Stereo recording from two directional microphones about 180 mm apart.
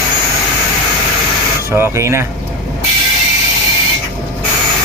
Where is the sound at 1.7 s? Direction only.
15° right (ahead or behind).